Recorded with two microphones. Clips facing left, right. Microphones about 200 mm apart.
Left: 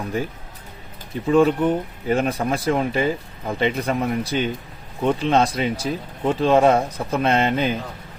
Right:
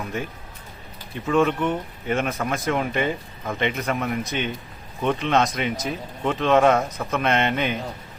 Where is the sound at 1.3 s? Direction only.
35° left (ahead or behind).